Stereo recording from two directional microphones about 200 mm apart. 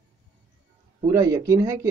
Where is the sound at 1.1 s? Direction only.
15° right (ahead or behind).